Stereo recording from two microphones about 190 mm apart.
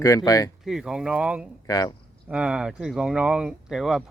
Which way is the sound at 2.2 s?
5° right (ahead or behind).